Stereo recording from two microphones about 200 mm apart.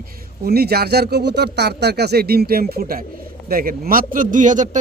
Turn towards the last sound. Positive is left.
turn(degrees=-40)  # may be behind; listen again after turning